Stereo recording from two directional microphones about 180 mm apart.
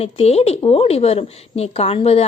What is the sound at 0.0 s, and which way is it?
A woman's voice, 35° left (ahead or behind).